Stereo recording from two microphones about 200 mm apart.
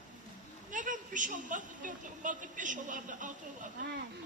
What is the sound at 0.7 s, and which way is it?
A woman's voice, 40° right (ahead or behind).